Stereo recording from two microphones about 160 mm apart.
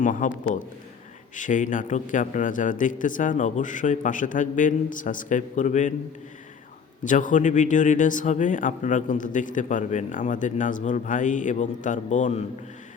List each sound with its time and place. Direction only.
0.0 s a man's voice: 55° left (ahead or behind)
1.4 s a man's voice: 50° left (ahead or behind)
7.0 s a man's voice: 55° left (ahead or behind)